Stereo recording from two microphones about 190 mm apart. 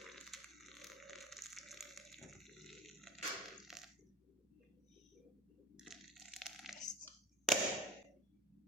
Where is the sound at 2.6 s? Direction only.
Centre (ahead or behind).